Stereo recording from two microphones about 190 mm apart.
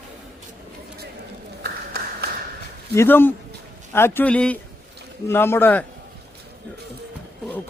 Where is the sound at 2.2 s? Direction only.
55° right (ahead or behind).